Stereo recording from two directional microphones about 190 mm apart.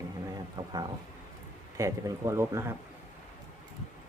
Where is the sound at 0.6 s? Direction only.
25° right (ahead or behind).